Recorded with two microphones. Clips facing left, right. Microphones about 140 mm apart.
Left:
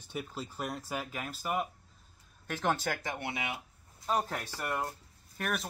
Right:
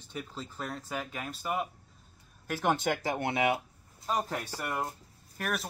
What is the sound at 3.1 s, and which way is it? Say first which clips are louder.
Speech: right 9 dB; 50° right (ahead or behind).